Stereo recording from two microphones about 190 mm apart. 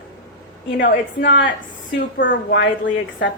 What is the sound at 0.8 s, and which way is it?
A woman's voice, 70° left (ahead or behind).